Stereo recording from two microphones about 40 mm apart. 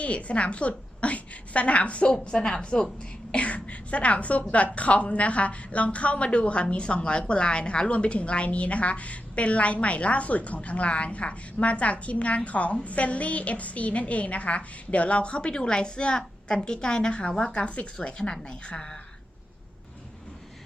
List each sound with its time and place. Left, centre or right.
0.0 s a woman's voice: left
2.0 s a woman's voice: left